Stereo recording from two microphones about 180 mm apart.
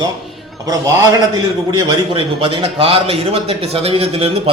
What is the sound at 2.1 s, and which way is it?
A man's voice, 30° right (ahead or behind).